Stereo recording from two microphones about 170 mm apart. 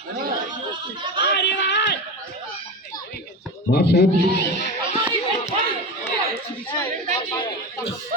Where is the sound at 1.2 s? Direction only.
90° left.